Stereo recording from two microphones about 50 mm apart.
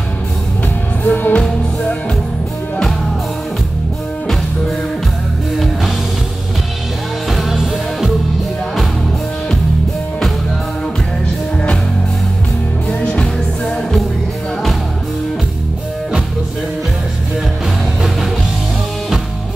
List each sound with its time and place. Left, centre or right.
1.0 s music: left
5.6 s music: centre
7.2 s music: centre
13.0 s music: centre